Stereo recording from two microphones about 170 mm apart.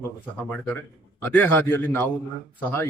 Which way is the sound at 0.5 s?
10° left (ahead or behind).